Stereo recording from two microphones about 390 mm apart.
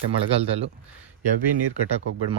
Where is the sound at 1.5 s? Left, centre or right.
Right.